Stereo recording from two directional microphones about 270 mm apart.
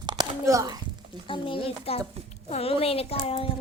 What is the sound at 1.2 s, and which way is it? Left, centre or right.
A child's voice, centre.